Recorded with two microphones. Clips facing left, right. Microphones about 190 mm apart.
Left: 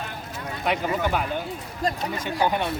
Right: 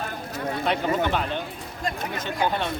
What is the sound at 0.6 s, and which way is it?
Speech, 10° left (ahead or behind).